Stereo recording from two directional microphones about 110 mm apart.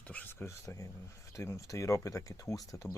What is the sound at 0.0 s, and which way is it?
Speech, 15° left (ahead or behind).